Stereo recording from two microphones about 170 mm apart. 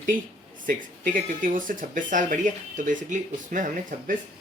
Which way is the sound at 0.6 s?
50° right (ahead or behind).